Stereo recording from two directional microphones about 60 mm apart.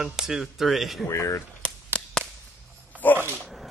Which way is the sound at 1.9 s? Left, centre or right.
Left.